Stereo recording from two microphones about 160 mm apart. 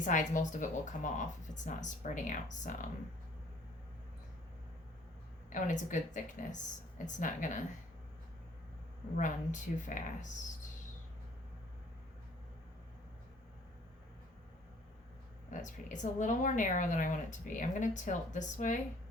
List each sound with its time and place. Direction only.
0.0 s a woman's voice: 55° left (ahead or behind)
5.5 s a woman's voice: 55° left (ahead or behind)
9.1 s a woman's voice: 50° left (ahead or behind)
15.4 s a woman's voice: 50° left (ahead or behind)